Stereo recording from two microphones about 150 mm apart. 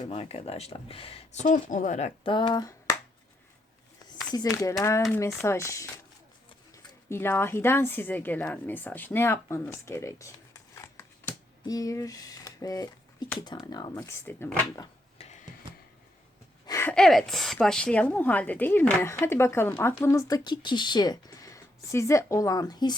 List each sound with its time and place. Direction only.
0.0 s speech: 40° left (ahead or behind)
2.2 s speech: 30° left (ahead or behind)
4.3 s speech: 25° left (ahead or behind)
7.1 s a woman's voice: 15° left (ahead or behind)
13.9 s a woman's voice: 15° left (ahead or behind)
16.6 s a sound: 20° left (ahead or behind)
16.9 s a woman's voice: 5° left (ahead or behind); by 23.0 s 30° left (ahead or behind)